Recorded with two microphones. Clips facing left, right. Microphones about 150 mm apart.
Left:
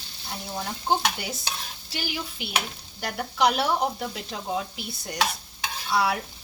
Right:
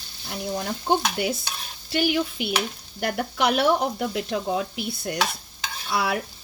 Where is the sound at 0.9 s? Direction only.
60° right (ahead or behind).